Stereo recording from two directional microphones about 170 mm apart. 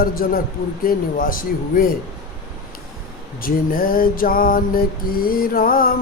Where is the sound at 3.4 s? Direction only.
55° left (ahead or behind).